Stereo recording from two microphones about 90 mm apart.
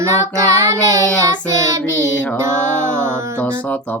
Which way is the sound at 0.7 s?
40° right (ahead or behind).